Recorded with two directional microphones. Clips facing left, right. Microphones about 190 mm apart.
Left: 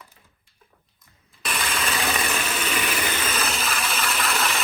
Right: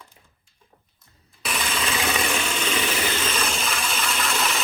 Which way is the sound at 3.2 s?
5° left (ahead or behind).